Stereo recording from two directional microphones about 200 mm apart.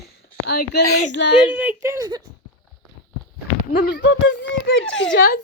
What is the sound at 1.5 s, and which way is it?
Speech, 10° right (ahead or behind).